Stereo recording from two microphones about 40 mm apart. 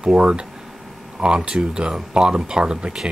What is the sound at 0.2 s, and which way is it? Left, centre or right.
Speech, right.